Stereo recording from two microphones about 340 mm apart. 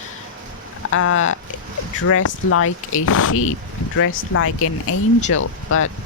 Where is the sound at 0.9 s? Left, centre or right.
Left.